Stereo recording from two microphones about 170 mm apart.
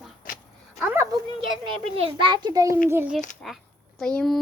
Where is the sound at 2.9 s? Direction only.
15° right (ahead or behind).